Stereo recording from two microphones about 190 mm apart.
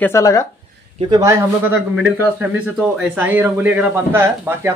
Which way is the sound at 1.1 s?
15° right (ahead or behind).